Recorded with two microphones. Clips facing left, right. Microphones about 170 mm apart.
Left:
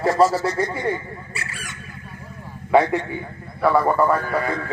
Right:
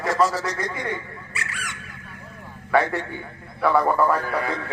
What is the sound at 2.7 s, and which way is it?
Speech, 15° left (ahead or behind).